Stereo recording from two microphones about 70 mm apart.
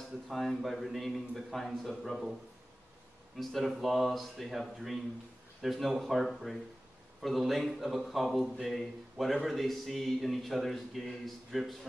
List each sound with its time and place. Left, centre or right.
0.3 s a man's voice: centre
3.3 s a man's voice: centre